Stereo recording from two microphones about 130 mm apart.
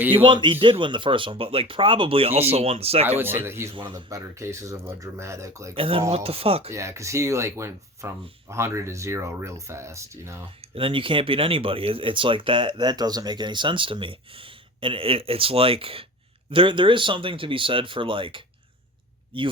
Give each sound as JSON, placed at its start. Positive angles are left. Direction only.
{"t": 0.3, "sound": "speech", "side_deg": -40}
{"t": 3.1, "sound": "speech", "side_deg": -15}
{"t": 3.8, "sound": "speech", "side_deg": -40}
{"t": 4.1, "sound": "speech", "side_deg": -20}
{"t": 5.7, "sound": "speech", "side_deg": -45}
{"t": 6.7, "sound": "speech", "side_deg": -25}
{"t": 10.8, "sound": "speech", "side_deg": -45}